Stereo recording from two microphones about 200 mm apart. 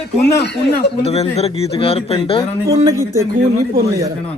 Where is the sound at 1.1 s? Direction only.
30° left (ahead or behind).